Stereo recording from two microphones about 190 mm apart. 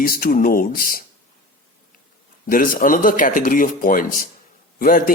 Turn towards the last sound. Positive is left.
turn(degrees=50)  # may be behind; listen again after turning